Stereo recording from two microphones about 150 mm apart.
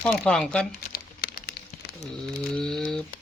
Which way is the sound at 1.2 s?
90° left.